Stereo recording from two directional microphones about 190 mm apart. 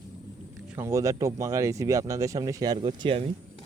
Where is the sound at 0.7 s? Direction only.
15° right (ahead or behind).